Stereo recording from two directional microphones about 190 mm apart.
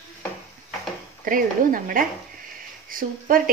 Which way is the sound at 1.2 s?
45° right (ahead or behind).